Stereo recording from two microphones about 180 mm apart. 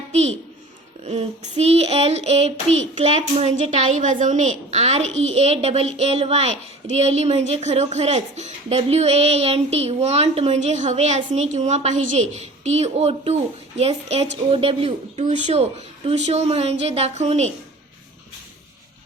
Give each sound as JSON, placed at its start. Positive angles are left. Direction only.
{"t": 0.1, "sound": "a child's voice", "side_deg": -35}
{"t": 1.0, "sound": "child singing", "side_deg": -35}